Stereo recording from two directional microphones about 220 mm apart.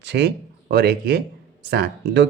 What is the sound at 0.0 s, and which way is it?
Speech, 50° right (ahead or behind).